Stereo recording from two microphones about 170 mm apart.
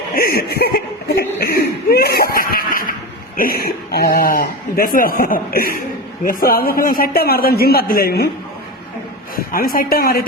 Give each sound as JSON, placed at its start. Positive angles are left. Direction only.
{"t": 0.1, "sound": "speech", "side_deg": 60}
{"t": 9.3, "sound": "speech", "side_deg": 60}